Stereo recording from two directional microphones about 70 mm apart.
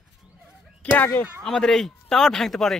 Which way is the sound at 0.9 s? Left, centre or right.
Left.